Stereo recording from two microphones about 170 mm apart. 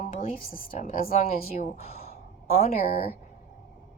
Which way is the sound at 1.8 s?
35° left (ahead or behind).